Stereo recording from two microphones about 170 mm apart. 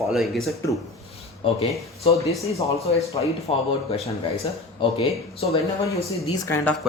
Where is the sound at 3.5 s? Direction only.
40° left (ahead or behind).